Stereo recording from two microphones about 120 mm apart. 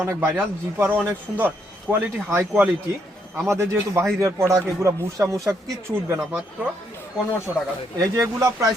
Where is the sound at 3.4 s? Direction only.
20° right (ahead or behind).